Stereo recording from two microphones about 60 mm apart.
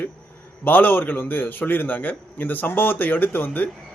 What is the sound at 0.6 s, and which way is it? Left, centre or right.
A man's voice, left.